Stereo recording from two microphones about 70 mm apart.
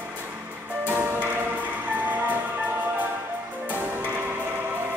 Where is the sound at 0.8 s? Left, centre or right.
Right.